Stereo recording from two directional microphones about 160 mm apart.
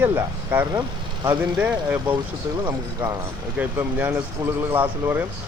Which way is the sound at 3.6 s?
10° right (ahead or behind).